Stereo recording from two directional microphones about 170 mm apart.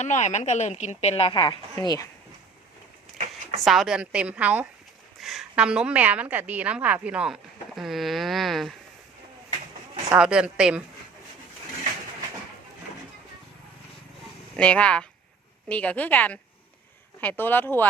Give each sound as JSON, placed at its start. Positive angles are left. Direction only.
{"t": 0.0, "sound": "a woman's voice", "side_deg": 45}
{"t": 1.4, "sound": "a woman's voice", "side_deg": 25}
{"t": 3.6, "sound": "a woman's voice", "side_deg": 0}
{"t": 10.1, "sound": "speech", "side_deg": -5}
{"t": 14.5, "sound": "a woman's voice", "side_deg": 5}